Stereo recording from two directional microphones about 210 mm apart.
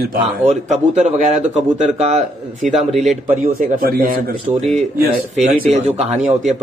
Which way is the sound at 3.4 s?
45° right (ahead or behind).